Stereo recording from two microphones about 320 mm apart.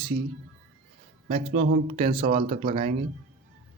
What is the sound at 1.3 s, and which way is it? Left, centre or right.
Speech, centre.